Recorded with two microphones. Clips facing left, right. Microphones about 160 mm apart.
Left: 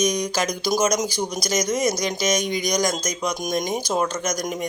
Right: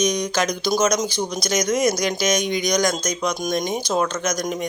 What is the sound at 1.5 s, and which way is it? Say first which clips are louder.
Speech: right 3 dB; 30° left (ahead or behind).